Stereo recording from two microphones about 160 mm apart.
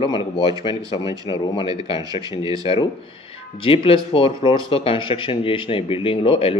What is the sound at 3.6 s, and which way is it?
Speech, 35° left (ahead or behind).